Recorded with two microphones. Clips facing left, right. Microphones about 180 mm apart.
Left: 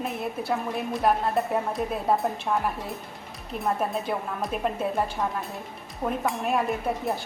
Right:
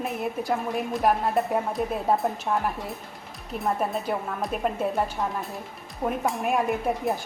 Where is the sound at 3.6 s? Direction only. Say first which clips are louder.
Even; centre (ahead or behind).